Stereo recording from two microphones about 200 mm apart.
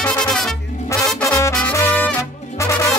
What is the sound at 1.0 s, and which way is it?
Music, 15° left (ahead or behind).